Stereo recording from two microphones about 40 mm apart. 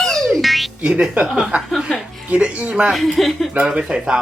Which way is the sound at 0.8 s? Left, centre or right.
Right.